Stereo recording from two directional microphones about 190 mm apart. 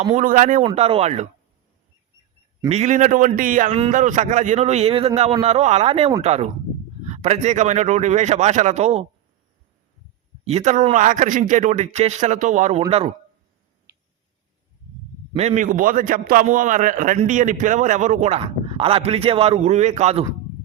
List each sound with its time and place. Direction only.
0.0 s a man's voice: 40° right (ahead or behind)
0.7 s a man's voice: 30° right (ahead or behind)
2.6 s a man's voice: 35° right (ahead or behind)
10.4 s a man's voice: 35° right (ahead or behind)
15.4 s a man's voice: 40° right (ahead or behind)